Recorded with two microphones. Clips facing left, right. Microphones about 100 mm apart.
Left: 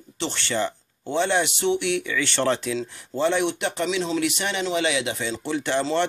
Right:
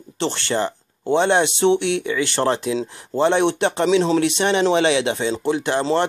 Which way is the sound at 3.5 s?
65° right (ahead or behind).